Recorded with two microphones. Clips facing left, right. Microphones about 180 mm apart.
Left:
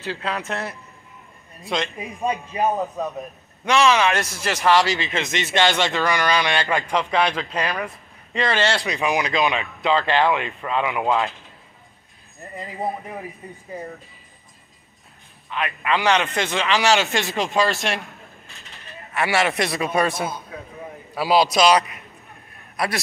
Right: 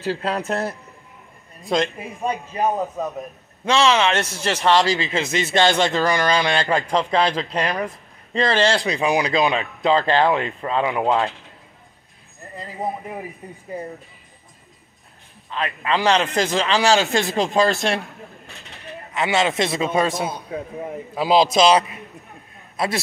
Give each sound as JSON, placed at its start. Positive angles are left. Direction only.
{"t": 0.0, "sound": "a man's voice", "side_deg": -35}
{"t": 2.0, "sound": "a man's voice", "side_deg": 15}
{"t": 2.6, "sound": "speech", "side_deg": 0}
{"t": 3.6, "sound": "a man's voice", "side_deg": -30}
{"t": 15.5, "sound": "a man's voice", "side_deg": -30}
{"t": 19.1, "sound": "a man's voice", "side_deg": -20}